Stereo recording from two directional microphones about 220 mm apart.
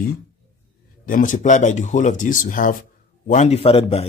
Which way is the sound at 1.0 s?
35° left (ahead or behind).